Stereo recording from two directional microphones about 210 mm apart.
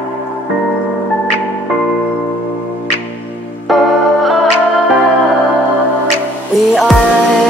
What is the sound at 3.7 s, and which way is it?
Music, centre (ahead or behind).